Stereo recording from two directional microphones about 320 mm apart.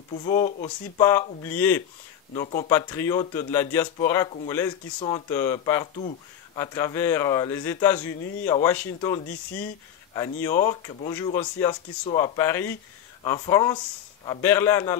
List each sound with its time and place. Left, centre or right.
0.1 s speech: centre
0.9 s speech: centre
2.3 s speech: centre